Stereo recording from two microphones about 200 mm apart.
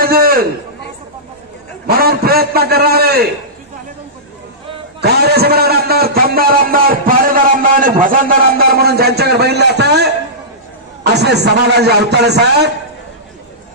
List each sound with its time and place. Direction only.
0.0 s a sound: 50° right (ahead or behind)
1.9 s a man's voice: 50° right (ahead or behind)
5.0 s a man's voice: 55° right (ahead or behind)
11.1 s a man's voice: 55° right (ahead or behind)